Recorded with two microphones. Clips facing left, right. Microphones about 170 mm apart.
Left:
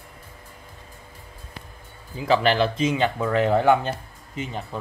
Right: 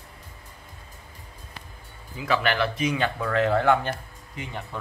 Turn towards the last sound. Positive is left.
turn(degrees=25)  # may be behind; listen again after turning